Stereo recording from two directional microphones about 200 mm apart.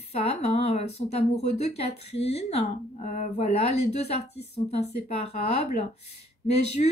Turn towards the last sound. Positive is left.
turn(degrees=35)  # may be behind; listen again after turning